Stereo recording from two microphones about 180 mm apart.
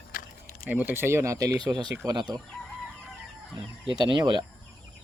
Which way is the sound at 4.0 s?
25° right (ahead or behind).